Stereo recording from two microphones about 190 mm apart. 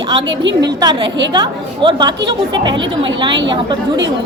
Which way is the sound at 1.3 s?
20° right (ahead or behind).